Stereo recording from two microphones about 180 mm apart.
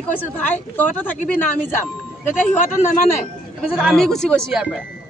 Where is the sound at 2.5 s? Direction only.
45° left (ahead or behind).